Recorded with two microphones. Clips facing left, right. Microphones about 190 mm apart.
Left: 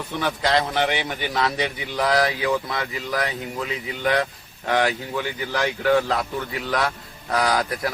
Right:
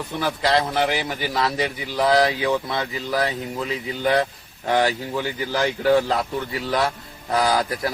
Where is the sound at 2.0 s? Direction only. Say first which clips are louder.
Right 3 dB; 30° right (ahead or behind).